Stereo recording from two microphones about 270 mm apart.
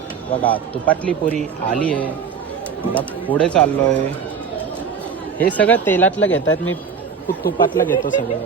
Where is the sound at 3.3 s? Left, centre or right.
Centre.